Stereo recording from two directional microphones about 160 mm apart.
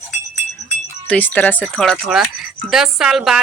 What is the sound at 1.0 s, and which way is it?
Speech, 10° left (ahead or behind).